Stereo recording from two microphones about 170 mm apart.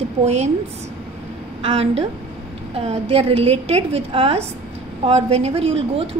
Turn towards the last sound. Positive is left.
turn(degrees=-35)  # may be behind; listen again after turning